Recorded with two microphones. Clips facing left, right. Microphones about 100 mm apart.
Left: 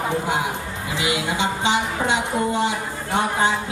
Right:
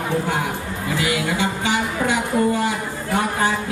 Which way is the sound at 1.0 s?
20° left (ahead or behind).